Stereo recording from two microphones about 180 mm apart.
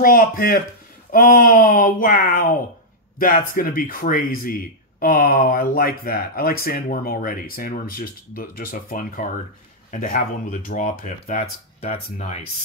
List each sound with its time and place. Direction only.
0.0 s speech: 50° left (ahead or behind); by 12.4 s 35° left (ahead or behind)